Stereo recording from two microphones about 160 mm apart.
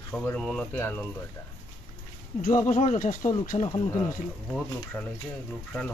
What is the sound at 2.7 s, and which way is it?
Speech, 45° left (ahead or behind).